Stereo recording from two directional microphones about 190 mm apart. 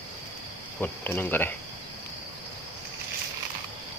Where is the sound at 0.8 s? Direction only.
10° left (ahead or behind).